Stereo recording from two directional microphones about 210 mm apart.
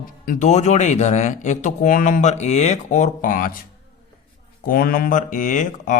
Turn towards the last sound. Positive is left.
turn(degrees=40)  # may be behind; listen again after turning